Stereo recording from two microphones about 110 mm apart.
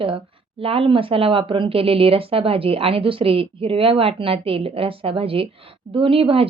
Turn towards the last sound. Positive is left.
turn(degrees=-55)  # may be behind; listen again after turning